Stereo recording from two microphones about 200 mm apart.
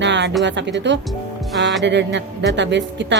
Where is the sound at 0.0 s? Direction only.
65° right (ahead or behind).